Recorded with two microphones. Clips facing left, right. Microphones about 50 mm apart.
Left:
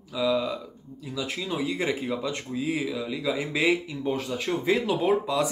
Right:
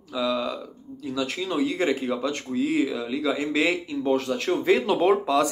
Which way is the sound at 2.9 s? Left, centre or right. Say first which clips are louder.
Right 3 dB; centre.